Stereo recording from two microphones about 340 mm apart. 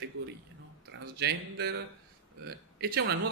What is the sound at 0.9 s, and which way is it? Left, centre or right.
A man's voice, right.